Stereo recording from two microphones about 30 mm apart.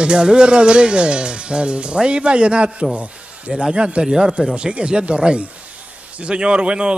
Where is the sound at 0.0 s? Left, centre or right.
Right.